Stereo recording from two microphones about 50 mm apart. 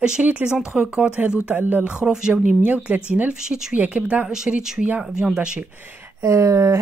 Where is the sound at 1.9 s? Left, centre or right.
Centre.